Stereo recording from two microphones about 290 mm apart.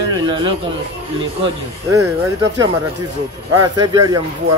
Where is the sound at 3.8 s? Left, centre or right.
Centre.